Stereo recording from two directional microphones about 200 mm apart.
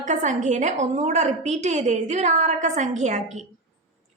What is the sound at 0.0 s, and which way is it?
A woman's voice, 35° right (ahead or behind).